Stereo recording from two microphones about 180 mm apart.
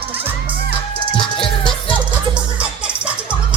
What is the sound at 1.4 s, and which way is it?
Music, 30° left (ahead or behind).